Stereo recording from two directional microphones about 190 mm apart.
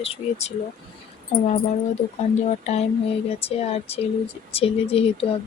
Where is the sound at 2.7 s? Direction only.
35° left (ahead or behind).